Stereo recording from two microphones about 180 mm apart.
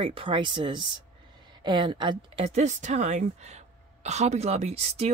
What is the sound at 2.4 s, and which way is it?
Speech, 40° right (ahead or behind).